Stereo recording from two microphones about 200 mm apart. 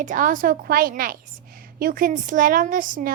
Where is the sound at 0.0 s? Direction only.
40° right (ahead or behind).